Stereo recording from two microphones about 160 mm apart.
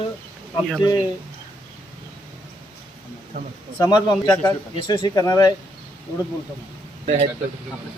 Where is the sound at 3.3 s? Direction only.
65° right (ahead or behind).